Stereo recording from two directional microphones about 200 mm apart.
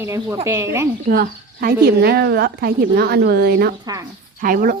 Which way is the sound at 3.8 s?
15° right (ahead or behind).